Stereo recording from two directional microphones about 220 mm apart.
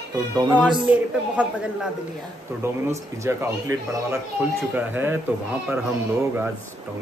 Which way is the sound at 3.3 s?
10° right (ahead or behind).